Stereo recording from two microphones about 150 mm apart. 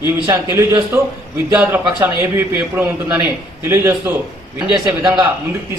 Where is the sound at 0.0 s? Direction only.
15° right (ahead or behind).